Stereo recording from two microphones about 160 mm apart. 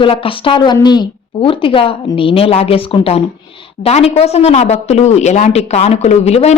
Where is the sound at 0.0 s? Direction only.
35° left (ahead or behind).